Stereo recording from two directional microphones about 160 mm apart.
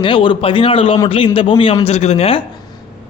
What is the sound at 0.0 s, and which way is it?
A man's voice, 30° left (ahead or behind).